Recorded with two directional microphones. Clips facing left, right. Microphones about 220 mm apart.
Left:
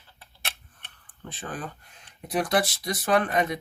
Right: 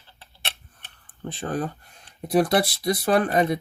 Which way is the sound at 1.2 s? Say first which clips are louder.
Right 8 dB; 40° right (ahead or behind).